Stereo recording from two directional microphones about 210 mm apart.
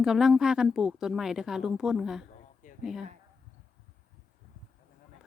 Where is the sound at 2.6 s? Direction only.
35° left (ahead or behind).